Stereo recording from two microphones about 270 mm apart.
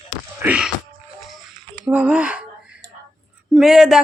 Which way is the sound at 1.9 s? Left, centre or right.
Centre.